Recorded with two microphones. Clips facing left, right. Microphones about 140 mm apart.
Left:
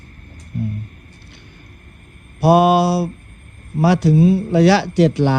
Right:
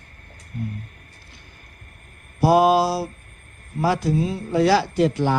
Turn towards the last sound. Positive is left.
turn(degrees=80)